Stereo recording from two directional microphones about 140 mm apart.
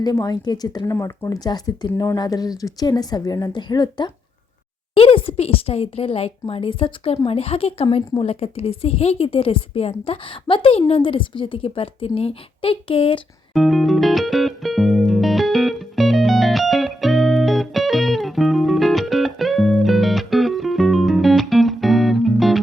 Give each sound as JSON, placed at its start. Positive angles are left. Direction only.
{"t": 0.0, "sound": "a woman's voice", "side_deg": 25}
{"t": 13.5, "sound": "music", "side_deg": 0}